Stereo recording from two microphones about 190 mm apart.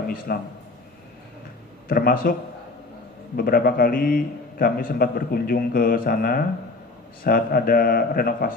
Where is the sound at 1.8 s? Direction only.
50° left (ahead or behind).